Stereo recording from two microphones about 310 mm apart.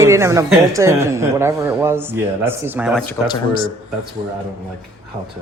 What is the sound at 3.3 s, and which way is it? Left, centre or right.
Speech, centre.